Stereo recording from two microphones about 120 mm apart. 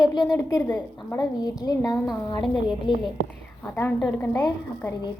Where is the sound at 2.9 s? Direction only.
40° left (ahead or behind).